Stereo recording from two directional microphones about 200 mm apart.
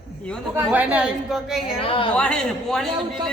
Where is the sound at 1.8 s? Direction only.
25° left (ahead or behind).